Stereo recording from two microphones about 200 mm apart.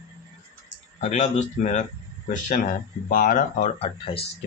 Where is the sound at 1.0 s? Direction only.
35° left (ahead or behind).